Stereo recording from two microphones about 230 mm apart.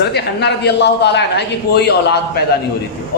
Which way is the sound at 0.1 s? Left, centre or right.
Left.